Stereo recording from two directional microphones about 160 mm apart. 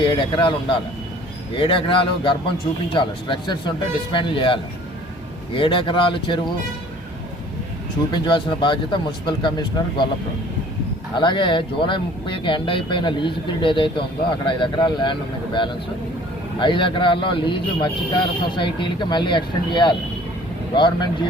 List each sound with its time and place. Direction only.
0.0 s a man's voice: 25° left (ahead or behind)
8.1 s a man's voice: 30° left (ahead or behind)
11.1 s a man's voice: 30° left (ahead or behind)